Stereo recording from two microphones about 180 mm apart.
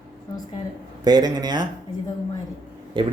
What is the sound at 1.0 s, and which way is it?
Speech, 20° right (ahead or behind).